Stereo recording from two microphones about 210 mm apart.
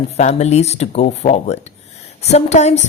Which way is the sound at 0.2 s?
35° left (ahead or behind).